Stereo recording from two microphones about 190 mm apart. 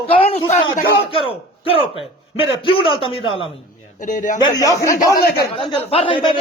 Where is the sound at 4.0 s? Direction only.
40° left (ahead or behind).